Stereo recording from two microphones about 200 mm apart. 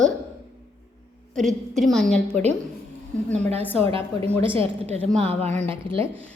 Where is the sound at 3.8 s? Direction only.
30° right (ahead or behind).